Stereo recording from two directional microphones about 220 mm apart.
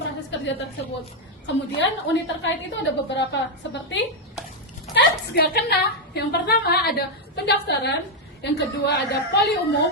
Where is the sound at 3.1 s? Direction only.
55° left (ahead or behind).